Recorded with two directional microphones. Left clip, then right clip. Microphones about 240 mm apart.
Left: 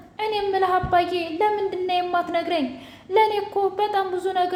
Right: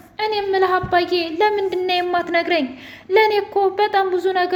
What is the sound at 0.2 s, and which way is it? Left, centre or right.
Speech, right.